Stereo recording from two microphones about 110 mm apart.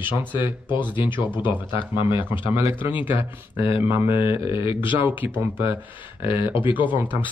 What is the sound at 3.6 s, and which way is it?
Speech, 55° left (ahead or behind).